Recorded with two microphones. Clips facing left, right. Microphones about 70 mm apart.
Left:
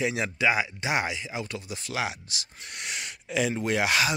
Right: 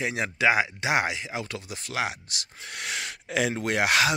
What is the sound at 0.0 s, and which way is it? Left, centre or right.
Speech, right.